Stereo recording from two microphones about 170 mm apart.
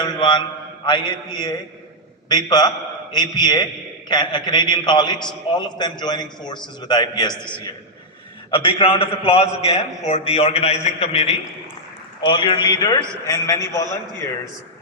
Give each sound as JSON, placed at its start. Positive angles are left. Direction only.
{"t": 0.0, "sound": "a man's voice", "side_deg": 25}